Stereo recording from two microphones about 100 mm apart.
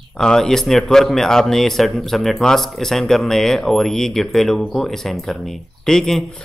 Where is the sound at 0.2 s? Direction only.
5° left (ahead or behind).